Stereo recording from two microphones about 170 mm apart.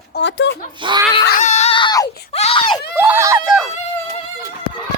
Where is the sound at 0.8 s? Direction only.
30° right (ahead or behind).